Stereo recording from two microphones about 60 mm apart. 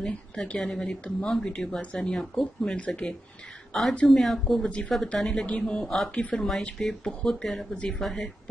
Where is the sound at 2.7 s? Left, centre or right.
Centre.